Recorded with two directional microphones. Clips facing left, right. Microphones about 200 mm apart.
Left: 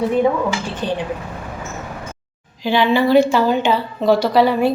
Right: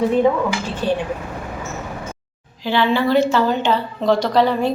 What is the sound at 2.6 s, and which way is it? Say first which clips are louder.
A woman's voice: left 2 dB; 15° left (ahead or behind).